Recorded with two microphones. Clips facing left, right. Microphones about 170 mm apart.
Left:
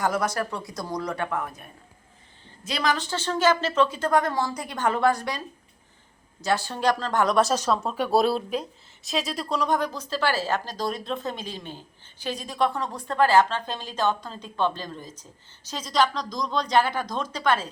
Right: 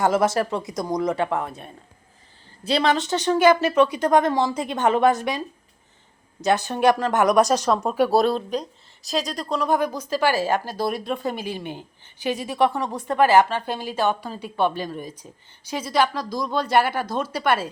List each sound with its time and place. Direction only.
0.0 s a woman's voice: 25° right (ahead or behind)
6.4 s speech: 20° right (ahead or behind)
8.1 s speech: 5° left (ahead or behind)